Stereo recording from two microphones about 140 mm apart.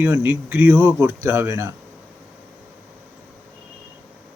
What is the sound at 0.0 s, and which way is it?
A man's voice, 15° right (ahead or behind).